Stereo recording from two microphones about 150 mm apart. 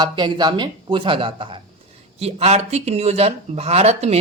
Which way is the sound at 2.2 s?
45° right (ahead or behind).